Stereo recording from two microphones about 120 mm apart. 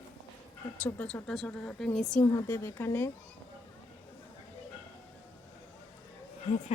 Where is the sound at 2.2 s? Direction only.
15° left (ahead or behind).